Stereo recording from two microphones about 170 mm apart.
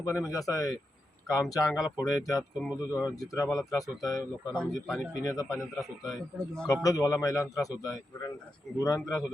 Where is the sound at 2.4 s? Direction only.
5° right (ahead or behind).